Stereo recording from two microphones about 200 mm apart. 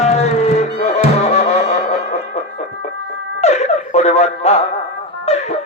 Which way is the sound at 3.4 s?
35° left (ahead or behind).